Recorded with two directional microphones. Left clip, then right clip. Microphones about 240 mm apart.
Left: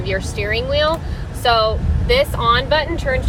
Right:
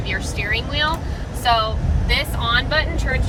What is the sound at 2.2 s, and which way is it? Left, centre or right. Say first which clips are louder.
Speech: left 5 dB; left.